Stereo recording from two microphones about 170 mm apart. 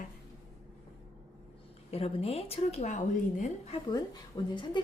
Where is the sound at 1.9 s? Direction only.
35° left (ahead or behind).